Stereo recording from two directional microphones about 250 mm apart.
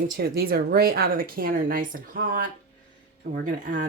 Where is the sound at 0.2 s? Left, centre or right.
Right.